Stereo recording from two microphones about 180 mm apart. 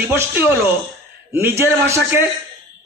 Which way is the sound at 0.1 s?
15° right (ahead or behind).